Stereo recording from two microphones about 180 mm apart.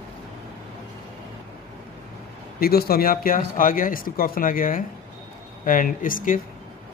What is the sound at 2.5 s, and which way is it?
Speech, 55° left (ahead or behind).